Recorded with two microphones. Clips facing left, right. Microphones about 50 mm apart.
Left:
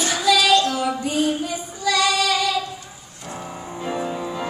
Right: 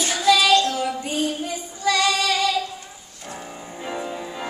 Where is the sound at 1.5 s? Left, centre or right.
Left.